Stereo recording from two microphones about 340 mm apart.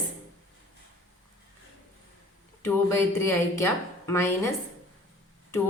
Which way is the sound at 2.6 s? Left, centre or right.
Centre.